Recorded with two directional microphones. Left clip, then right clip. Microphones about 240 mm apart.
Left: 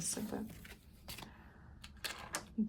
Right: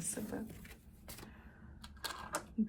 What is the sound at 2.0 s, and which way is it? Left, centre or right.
Cash register, centre.